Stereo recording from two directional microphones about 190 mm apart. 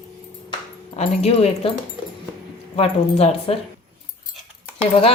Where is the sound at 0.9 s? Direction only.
35° left (ahead or behind).